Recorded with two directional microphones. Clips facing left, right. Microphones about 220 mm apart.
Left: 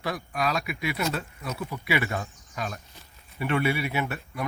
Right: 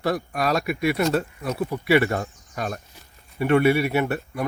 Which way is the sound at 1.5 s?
35° right (ahead or behind).